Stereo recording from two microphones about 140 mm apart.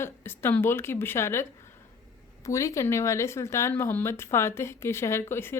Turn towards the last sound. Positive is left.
turn(degrees=15)  # may be behind; listen again after turning